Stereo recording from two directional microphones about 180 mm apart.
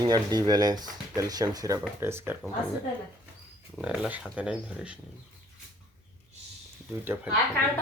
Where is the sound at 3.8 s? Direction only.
5° right (ahead or behind).